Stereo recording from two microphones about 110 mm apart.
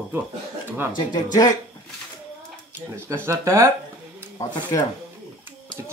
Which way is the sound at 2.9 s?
20° right (ahead or behind).